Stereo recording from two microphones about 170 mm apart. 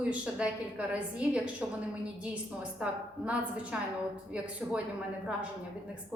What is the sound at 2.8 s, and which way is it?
A woman's voice, 10° right (ahead or behind).